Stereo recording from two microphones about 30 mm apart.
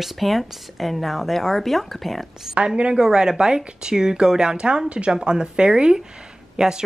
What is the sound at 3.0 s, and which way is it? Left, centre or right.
Speech, right.